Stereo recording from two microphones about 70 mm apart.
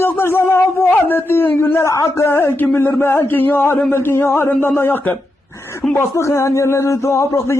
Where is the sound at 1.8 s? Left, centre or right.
Left.